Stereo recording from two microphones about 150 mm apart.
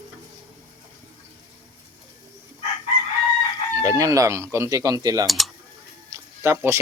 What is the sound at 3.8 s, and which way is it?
Speech, 20° right (ahead or behind).